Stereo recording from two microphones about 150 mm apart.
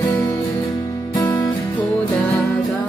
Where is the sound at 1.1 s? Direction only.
20° left (ahead or behind).